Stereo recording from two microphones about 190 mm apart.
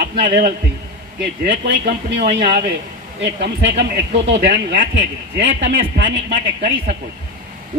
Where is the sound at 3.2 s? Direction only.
70° right (ahead or behind).